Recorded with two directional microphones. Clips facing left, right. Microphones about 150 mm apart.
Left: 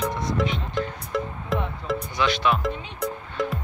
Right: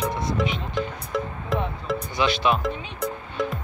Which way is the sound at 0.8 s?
Centre (ahead or behind).